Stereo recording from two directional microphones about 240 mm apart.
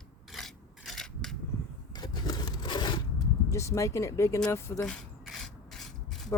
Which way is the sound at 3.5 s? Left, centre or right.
Centre.